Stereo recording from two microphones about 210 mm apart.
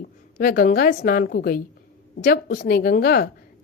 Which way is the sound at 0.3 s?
45° left (ahead or behind).